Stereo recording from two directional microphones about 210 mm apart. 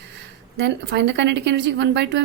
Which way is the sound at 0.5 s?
55° right (ahead or behind).